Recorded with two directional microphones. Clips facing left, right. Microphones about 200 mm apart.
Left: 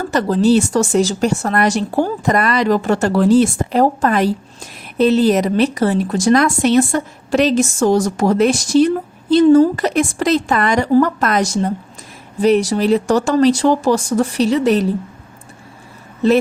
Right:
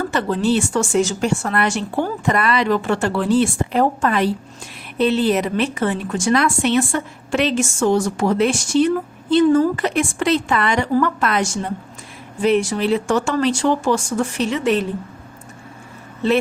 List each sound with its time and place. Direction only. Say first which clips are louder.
0.1 s speech: left 8 dB; 40° left (ahead or behind)
16.2 s speech: left 4 dB; 40° left (ahead or behind)